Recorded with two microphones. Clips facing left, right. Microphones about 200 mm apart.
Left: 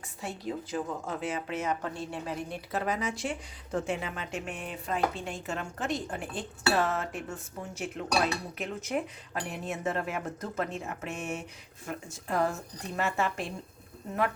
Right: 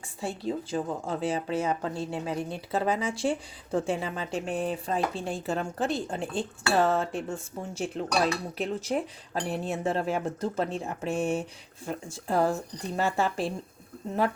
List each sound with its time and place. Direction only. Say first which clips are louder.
0.2 s speech: right 4 dB; 30° right (ahead or behind)